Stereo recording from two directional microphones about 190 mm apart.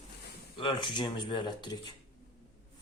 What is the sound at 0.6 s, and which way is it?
Speech, 25° left (ahead or behind).